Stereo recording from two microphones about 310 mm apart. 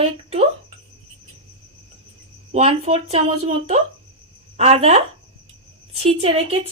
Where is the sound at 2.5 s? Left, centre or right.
Centre.